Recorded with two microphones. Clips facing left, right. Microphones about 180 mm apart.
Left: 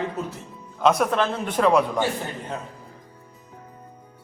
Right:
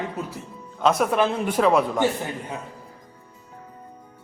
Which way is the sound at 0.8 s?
Centre (ahead or behind).